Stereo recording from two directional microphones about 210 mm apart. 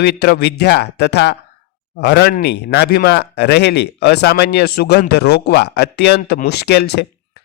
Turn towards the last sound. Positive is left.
turn(degrees=50)  # may be behind; listen again after turning